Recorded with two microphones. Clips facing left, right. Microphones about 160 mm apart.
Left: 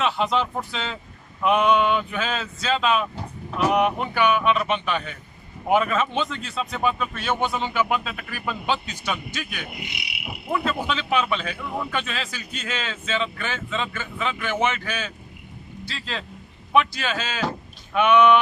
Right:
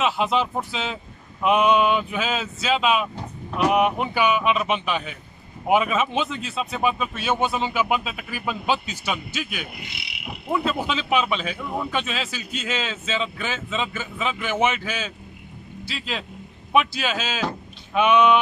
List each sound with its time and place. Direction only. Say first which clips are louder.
0.0 s a man's voice: right 1 dB; 10° right (ahead or behind)
9.8 s cricket: left 1 dB; 15° left (ahead or behind)
10.5 s a man's voice: right 1 dB; 15° right (ahead or behind)